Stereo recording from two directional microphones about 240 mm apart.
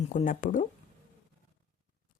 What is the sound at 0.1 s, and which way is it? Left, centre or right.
Speech, left.